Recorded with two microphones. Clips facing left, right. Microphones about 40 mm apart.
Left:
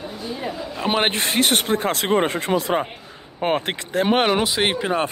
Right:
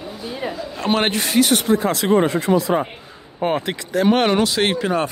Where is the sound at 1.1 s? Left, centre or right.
Left.